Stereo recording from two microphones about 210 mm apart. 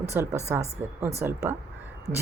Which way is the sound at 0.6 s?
30° right (ahead or behind).